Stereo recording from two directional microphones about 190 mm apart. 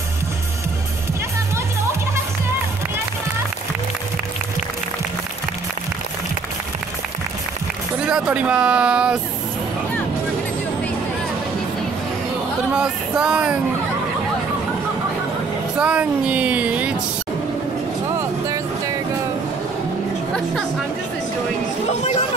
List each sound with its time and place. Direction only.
8.1 s speech: 5° right (ahead or behind)
12.7 s speech: 5° right (ahead or behind)
15.8 s speech: 5° right (ahead or behind)
21.8 s speech: 35° left (ahead or behind)